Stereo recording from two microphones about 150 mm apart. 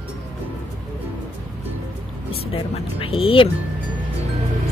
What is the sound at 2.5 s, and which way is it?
Speech, 40° left (ahead or behind).